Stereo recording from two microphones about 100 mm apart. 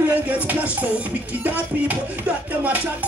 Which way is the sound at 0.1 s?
15° right (ahead or behind).